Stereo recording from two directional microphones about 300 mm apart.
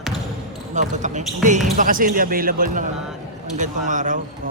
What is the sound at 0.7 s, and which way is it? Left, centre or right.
Speech, right.